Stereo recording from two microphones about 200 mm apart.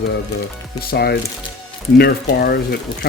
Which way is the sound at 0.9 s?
50° left (ahead or behind).